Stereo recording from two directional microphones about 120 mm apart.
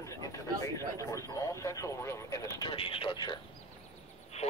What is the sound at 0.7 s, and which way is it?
Speech, 25° left (ahead or behind).